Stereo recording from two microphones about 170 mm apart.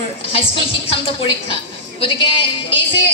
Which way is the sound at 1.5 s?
35° left (ahead or behind).